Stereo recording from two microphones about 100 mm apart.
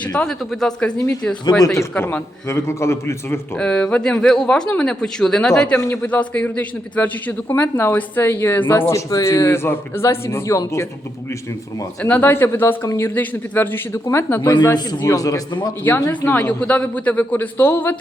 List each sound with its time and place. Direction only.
0.3 s speech: 10° left (ahead or behind)
1.6 s a man's voice: 30° left (ahead or behind)
3.6 s speech: 10° left (ahead or behind)
5.8 s a man's voice: 25° left (ahead or behind)
6.1 s a man's voice: 15° left (ahead or behind); by 10.8 s 30° left (ahead or behind)
12.0 s a man's voice: 20° left (ahead or behind)
14.4 s a man's voice: 45° left (ahead or behind); by 16.4 s 25° left (ahead or behind)
16.4 s speech: 10° left (ahead or behind)